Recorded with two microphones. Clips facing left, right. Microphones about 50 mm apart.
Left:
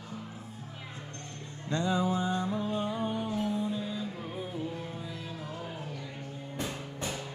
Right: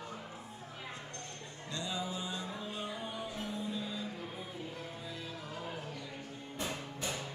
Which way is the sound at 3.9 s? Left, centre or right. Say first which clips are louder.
Left 4 dB; centre.